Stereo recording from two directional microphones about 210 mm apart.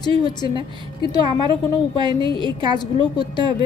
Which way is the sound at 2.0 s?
25° right (ahead or behind).